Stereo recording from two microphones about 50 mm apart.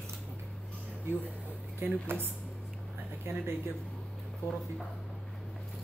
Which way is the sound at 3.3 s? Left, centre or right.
Right.